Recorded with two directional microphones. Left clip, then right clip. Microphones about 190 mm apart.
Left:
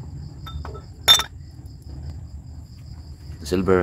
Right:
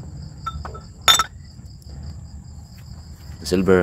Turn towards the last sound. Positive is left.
turn(degrees=-10)  # may be behind; listen again after turning